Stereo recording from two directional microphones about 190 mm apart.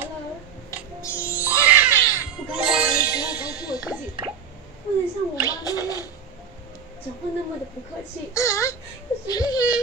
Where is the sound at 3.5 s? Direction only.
20° left (ahead or behind).